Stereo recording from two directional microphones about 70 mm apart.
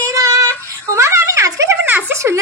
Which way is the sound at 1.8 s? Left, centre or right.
Right.